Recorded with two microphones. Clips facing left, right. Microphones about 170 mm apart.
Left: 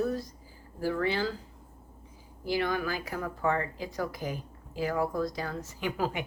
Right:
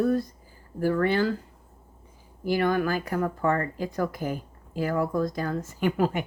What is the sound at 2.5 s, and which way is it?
Speech, 50° right (ahead or behind).